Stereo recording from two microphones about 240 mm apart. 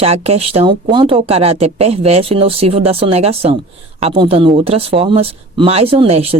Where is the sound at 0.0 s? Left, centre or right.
Right.